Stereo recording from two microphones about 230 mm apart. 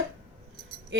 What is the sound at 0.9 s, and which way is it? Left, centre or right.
Music, right.